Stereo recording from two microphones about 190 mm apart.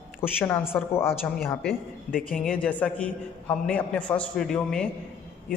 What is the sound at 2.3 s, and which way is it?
A man's voice, 5° left (ahead or behind).